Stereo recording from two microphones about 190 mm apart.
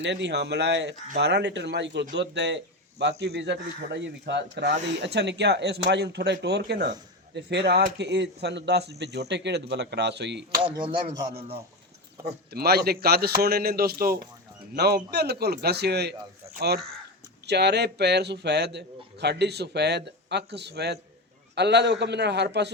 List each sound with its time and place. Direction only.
0.0 s a man's voice: 65° right (ahead or behind)
10.6 s a man's voice: 25° right (ahead or behind)
12.2 s a man's voice: 55° right (ahead or behind)